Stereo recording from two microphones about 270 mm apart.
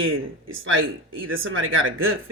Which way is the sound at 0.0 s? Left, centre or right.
Right.